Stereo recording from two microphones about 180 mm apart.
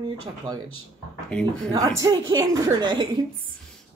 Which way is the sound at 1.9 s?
20° right (ahead or behind).